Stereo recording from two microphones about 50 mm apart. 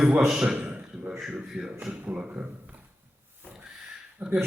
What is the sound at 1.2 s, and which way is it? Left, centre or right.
Speech, centre.